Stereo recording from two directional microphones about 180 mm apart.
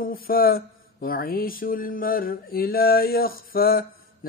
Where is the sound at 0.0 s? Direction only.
55° left (ahead or behind).